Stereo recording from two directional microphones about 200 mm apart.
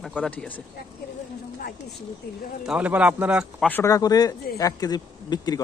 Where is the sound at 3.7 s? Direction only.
15° left (ahead or behind).